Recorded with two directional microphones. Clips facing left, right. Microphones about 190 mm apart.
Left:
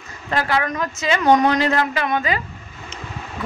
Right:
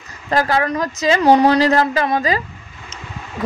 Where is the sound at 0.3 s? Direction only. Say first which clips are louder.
Right 4 dB; 40° right (ahead or behind).